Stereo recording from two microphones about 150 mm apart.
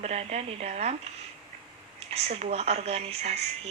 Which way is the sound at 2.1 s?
45° right (ahead or behind).